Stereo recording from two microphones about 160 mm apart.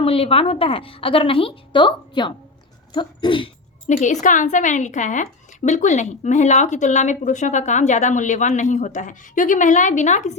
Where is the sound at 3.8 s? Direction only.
55° left (ahead or behind).